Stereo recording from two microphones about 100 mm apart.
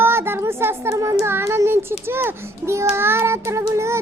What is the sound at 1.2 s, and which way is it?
A child's voice, 25° right (ahead or behind).